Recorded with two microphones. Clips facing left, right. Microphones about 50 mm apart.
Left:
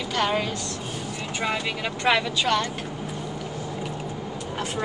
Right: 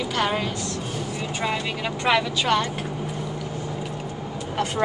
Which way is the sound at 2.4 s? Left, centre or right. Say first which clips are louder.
Right 2 dB; centre.